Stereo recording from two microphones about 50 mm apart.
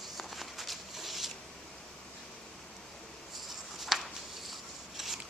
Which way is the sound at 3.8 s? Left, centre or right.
Centre.